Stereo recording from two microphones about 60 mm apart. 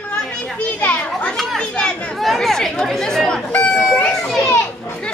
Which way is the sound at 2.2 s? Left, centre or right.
Centre.